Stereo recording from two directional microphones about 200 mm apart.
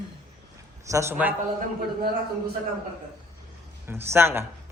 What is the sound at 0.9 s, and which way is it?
Speech, 15° right (ahead or behind).